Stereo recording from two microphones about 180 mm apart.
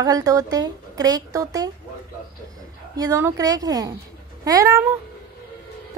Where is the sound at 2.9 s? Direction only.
15° right (ahead or behind).